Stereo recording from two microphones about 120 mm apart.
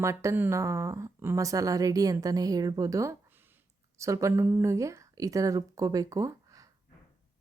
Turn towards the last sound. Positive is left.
turn(degrees=-30)  # may be behind; listen again after turning